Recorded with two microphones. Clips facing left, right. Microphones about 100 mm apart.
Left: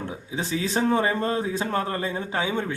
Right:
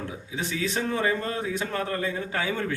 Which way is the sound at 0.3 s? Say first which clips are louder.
Left 2 dB; 30° left (ahead or behind).